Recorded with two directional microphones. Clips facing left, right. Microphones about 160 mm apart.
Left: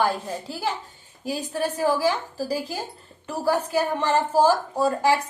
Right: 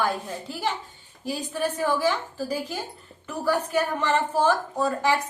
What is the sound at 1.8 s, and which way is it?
A woman's voice, 35° left (ahead or behind).